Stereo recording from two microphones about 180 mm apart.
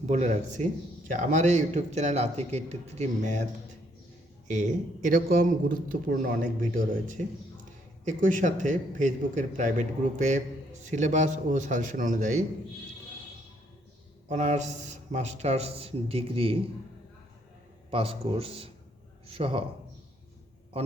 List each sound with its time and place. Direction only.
0.0 s a man's voice: 40° right (ahead or behind)
4.4 s a man's voice: 45° right (ahead or behind)
14.3 s a man's voice: 40° right (ahead or behind)
17.9 s a man's voice: 30° right (ahead or behind)